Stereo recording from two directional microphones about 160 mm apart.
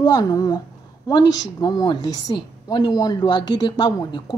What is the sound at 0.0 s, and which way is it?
A woman's voice, 25° left (ahead or behind).